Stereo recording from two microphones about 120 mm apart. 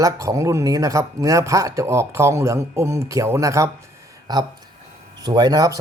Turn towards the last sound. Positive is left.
turn(degrees=-30)  # may be behind; listen again after turning